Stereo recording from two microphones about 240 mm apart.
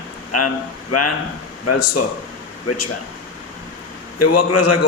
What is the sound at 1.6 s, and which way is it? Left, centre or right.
A man's voice, left.